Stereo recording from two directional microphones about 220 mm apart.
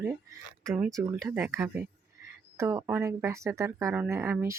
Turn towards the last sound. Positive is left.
turn(degrees=-10)  # may be behind; listen again after turning